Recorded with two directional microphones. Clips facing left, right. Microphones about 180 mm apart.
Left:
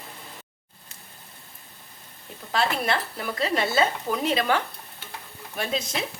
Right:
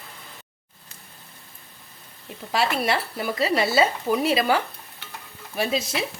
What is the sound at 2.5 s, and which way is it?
Speech, 10° right (ahead or behind).